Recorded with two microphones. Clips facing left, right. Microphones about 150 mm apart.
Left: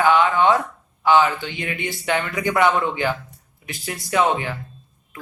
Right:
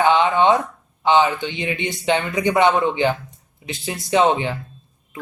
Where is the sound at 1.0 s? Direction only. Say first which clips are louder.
Even; 20° right (ahead or behind).